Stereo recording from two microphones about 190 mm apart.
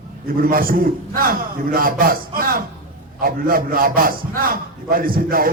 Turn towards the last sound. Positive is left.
turn(degrees=-50)  # may be behind; listen again after turning